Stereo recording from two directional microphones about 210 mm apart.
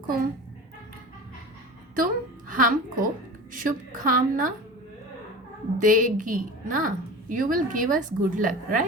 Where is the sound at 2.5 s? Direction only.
40° right (ahead or behind).